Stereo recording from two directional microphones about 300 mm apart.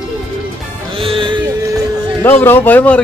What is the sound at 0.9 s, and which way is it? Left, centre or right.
Music, centre.